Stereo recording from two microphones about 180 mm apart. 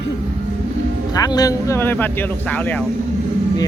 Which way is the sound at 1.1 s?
20° left (ahead or behind).